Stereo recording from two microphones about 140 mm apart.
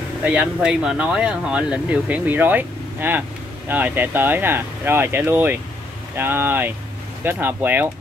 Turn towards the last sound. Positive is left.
turn(degrees=-15)  # may be behind; listen again after turning